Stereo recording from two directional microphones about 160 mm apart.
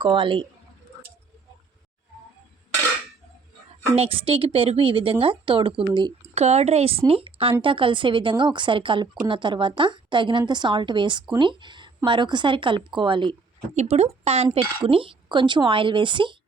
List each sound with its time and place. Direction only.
0.0 s a woman's voice: 30° right (ahead or behind)
3.7 s a woman's voice: 35° right (ahead or behind)
13.7 s a woman's voice: 40° right (ahead or behind)